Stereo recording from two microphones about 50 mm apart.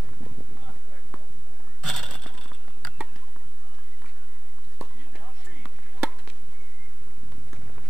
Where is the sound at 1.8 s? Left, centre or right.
Centre.